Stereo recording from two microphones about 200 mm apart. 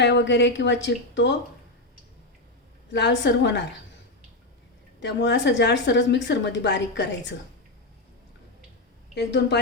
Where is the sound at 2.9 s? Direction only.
60° left (ahead or behind).